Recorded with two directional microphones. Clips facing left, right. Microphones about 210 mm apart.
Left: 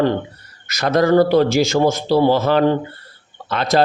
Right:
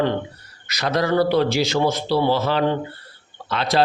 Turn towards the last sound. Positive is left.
turn(degrees=50)  # may be behind; listen again after turning